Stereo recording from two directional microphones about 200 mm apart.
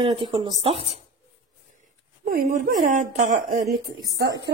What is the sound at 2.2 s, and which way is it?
Speech, 45° right (ahead or behind).